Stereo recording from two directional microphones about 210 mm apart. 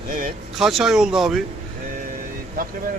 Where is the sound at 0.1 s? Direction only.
40° right (ahead or behind).